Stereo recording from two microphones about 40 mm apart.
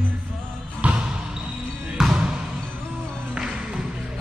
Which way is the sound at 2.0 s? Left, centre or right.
Centre.